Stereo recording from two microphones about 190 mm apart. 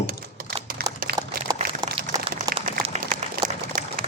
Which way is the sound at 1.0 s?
50° right (ahead or behind).